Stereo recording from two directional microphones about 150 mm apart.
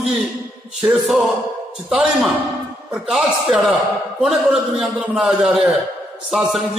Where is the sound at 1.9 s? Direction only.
5° right (ahead or behind).